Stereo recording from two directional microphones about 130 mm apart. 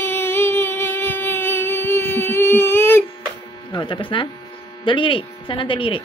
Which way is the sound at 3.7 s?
40° left (ahead or behind).